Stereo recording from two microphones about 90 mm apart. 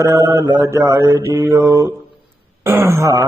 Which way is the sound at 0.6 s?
30° right (ahead or behind).